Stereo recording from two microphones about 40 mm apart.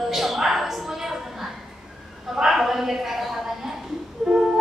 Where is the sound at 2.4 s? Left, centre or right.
Centre.